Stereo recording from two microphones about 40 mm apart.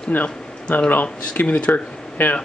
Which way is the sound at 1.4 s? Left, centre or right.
Left.